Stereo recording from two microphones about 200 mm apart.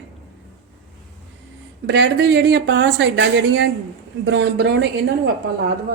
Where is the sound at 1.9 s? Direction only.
60° right (ahead or behind).